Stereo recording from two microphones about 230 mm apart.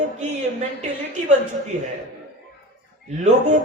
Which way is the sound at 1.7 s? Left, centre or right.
Right.